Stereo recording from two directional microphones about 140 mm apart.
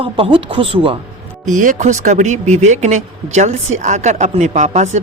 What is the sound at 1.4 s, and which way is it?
Speech, 65° right (ahead or behind).